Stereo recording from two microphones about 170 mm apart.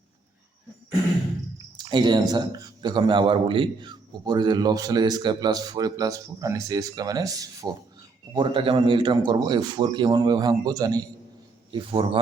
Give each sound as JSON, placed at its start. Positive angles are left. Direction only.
{"t": 1.8, "sound": "a man's voice", "side_deg": -25}